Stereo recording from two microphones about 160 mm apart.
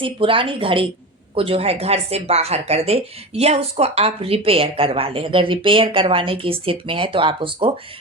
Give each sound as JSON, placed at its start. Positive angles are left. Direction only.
{"t": 0.0, "sound": "a woman's voice", "side_deg": -35}